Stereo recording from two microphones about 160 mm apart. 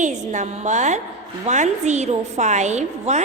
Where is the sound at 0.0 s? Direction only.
50° right (ahead or behind).